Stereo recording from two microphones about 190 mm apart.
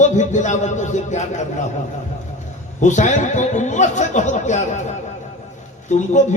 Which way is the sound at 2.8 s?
40° left (ahead or behind).